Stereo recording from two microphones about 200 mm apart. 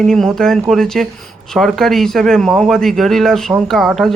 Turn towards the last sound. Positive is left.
turn(degrees=0)  # may be behind; listen again after turning